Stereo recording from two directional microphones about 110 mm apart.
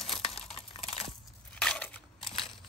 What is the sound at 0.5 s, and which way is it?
Computer keyboard, 60° left (ahead or behind).